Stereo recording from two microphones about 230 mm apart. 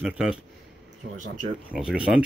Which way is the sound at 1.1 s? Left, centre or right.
Right.